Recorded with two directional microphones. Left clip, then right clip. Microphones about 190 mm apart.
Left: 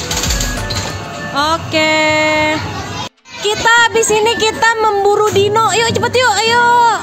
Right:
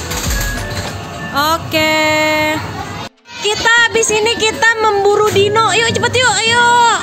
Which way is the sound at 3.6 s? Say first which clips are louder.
Left 1 dB; 15° left (ahead or behind).